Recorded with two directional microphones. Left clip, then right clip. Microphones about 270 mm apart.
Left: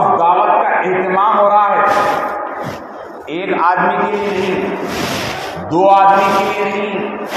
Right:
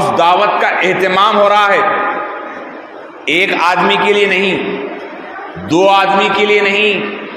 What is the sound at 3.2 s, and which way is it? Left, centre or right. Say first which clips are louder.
Speech: right 3 dB; right.